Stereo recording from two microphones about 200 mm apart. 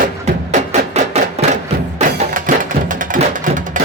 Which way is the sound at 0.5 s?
35° right (ahead or behind).